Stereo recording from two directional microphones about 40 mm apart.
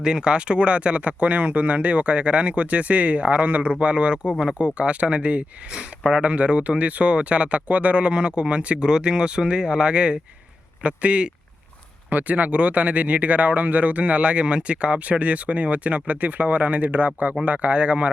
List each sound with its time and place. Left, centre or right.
0.0 s speech: right
5.7 s speech: centre
6.2 s speech: right